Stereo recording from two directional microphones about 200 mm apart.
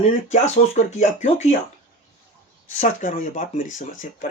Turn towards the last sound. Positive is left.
turn(degrees=40)  # may be behind; listen again after turning